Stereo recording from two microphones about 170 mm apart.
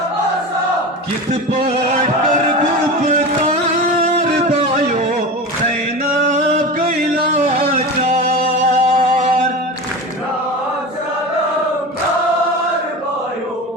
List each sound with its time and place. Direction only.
1.3 s a sound: 40° right (ahead or behind)
4.0 s music: 45° right (ahead or behind)
6.2 s music: 45° right (ahead or behind)